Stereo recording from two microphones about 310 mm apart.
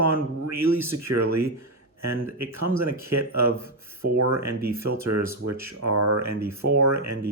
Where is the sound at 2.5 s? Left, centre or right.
Right.